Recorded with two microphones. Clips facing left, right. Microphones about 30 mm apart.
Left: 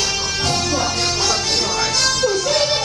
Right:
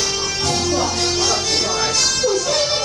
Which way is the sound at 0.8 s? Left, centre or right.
Centre.